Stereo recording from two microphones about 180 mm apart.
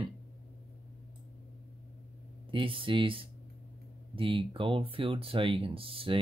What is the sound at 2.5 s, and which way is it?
Speech, 30° right (ahead or behind).